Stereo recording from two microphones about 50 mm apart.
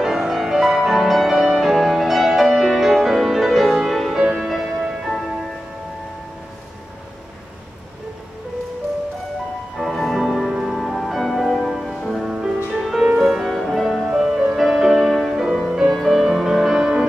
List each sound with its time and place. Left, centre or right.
0.0 s music: centre
9.8 s music: centre
13.8 s music: centre